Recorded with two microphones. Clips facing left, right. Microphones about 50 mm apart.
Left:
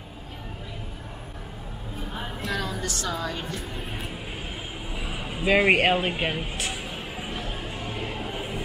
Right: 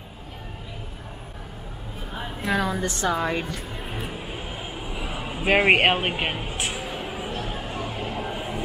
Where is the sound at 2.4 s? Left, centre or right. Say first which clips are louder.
Right 6 dB; right.